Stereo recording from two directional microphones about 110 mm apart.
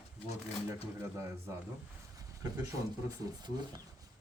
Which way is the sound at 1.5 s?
30° right (ahead or behind).